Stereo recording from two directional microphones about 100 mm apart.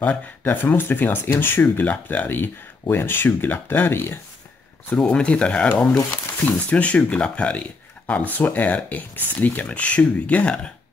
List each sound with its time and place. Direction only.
0.0 s speech: 15° left (ahead or behind)
4.9 s speech: 10° left (ahead or behind)